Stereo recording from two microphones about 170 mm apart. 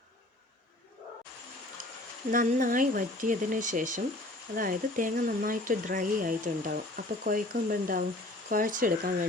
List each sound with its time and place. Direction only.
2.3 s speech: 50° right (ahead or behind)